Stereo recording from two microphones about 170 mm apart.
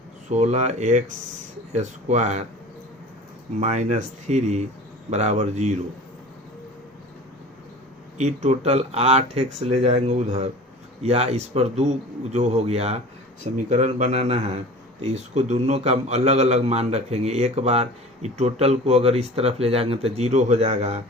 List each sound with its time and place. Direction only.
0.3 s speech: 45° right (ahead or behind)
3.6 s speech: 40° right (ahead or behind)
8.2 s a man's voice: 40° right (ahead or behind)